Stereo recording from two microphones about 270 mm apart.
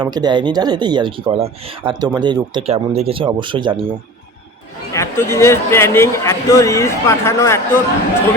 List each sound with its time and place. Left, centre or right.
0.0 s speech: centre
4.9 s a man's voice: centre